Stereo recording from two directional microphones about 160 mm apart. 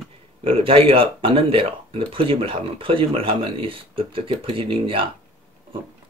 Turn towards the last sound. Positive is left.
turn(degrees=-35)  # may be behind; listen again after turning